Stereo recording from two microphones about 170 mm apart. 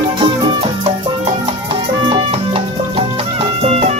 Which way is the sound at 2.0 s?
30° right (ahead or behind).